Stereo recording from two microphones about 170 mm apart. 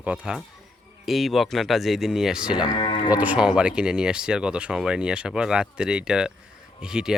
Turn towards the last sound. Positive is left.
turn(degrees=-5)  # may be behind; listen again after turning